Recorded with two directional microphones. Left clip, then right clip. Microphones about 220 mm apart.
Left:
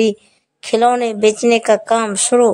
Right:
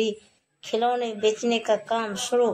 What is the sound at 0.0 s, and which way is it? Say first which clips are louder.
A woman's voice: left 10 dB; 45° left (ahead or behind).